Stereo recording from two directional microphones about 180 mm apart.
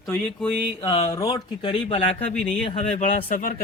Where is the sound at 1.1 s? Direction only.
20° left (ahead or behind).